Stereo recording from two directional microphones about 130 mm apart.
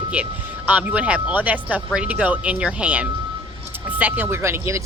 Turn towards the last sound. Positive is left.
turn(degrees=-20)  # may be behind; listen again after turning